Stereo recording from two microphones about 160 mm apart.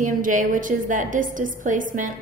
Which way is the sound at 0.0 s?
55° right (ahead or behind).